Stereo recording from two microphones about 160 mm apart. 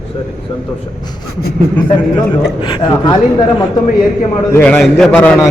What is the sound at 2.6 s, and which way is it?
Speech, 30° left (ahead or behind).